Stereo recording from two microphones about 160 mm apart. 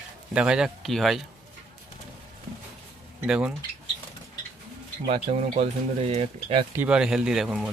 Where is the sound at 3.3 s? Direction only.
5° right (ahead or behind).